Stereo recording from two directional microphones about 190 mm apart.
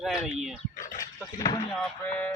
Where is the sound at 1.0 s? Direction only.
20° left (ahead or behind).